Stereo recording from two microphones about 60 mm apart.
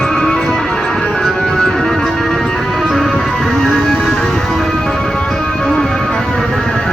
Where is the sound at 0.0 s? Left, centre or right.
Centre.